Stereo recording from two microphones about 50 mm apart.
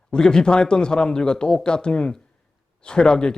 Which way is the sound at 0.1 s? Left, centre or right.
Centre.